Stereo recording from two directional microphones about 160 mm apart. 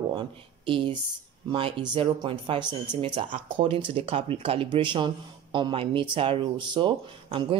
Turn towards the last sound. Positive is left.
turn(degrees=-30)  # may be behind; listen again after turning